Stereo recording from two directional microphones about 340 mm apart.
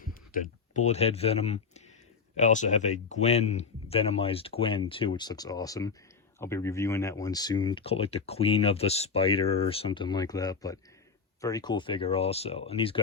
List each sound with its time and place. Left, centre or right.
0.0 s speech: left